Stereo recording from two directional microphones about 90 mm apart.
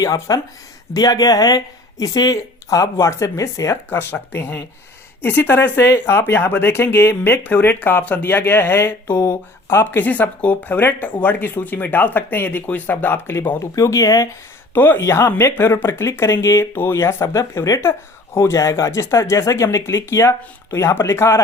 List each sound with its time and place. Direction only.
0.0 s speech: 40° left (ahead or behind)
3.8 s speech: 20° left (ahead or behind)
9.1 s speech: 45° left (ahead or behind)
9.6 s speech: 25° left (ahead or behind)
14.7 s speech: 25° left (ahead or behind)